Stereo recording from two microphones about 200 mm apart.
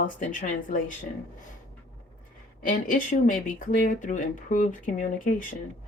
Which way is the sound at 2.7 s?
40° left (ahead or behind).